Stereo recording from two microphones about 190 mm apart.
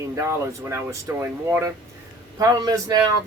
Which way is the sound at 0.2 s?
15° right (ahead or behind).